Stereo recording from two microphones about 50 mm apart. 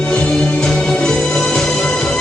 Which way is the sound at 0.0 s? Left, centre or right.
Centre.